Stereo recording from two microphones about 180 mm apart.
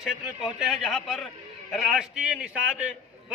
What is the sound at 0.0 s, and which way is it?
A man's voice, centre (ahead or behind).